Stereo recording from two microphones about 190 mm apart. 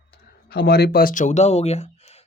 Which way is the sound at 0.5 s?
55° left (ahead or behind).